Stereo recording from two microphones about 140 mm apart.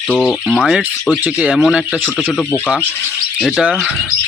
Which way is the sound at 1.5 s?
Centre (ahead or behind).